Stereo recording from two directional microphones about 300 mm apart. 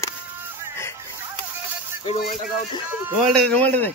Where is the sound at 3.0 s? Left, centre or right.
Centre.